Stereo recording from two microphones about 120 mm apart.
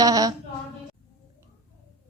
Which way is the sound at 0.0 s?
30° right (ahead or behind).